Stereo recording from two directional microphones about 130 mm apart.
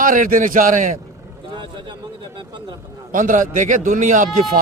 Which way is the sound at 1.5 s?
40° right (ahead or behind).